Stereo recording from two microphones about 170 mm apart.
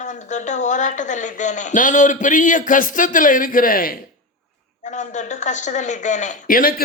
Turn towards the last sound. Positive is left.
turn(degrees=55)  # may be behind; listen again after turning